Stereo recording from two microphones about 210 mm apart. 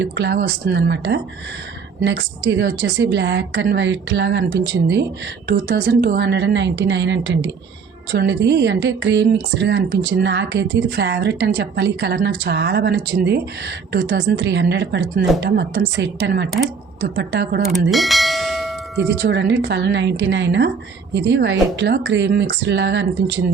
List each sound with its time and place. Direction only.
0.0 s a woman's voice: 55° right (ahead or behind)
17.9 s bell: centre (ahead or behind)
19.3 s a woman's voice: 55° right (ahead or behind)